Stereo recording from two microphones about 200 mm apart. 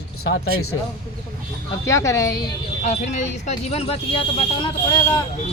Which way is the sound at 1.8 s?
15° left (ahead or behind).